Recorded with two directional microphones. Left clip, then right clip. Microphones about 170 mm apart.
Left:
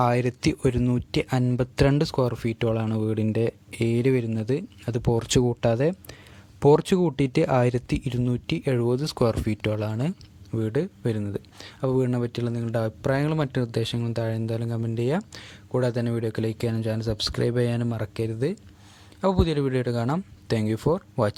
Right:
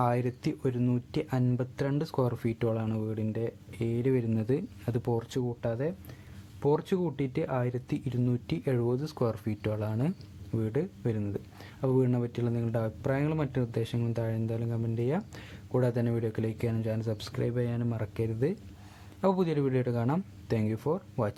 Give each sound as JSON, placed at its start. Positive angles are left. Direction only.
{"t": 0.0, "sound": "speech", "side_deg": 30}
{"t": 2.0, "sound": "speech", "side_deg": 25}
{"t": 5.2, "sound": "speech", "side_deg": 40}
{"t": 15.2, "sound": "speech", "side_deg": 15}